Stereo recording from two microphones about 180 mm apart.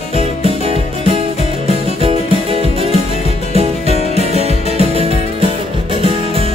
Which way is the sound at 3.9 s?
35° left (ahead or behind).